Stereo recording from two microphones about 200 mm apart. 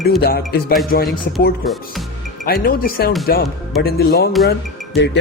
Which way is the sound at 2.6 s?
45° left (ahead or behind).